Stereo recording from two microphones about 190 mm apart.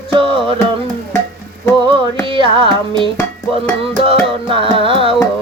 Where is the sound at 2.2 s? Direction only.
25° right (ahead or behind).